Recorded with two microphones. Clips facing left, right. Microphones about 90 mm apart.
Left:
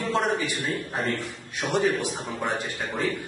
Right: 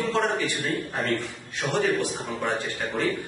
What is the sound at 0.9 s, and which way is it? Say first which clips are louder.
Speech: right 1 dB; 20° left (ahead or behind).